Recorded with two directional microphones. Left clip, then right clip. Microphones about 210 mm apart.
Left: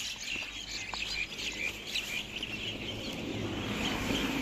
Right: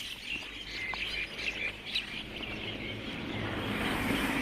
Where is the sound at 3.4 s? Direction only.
40° right (ahead or behind).